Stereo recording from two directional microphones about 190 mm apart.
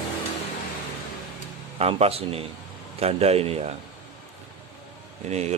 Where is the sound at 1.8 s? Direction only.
30° right (ahead or behind).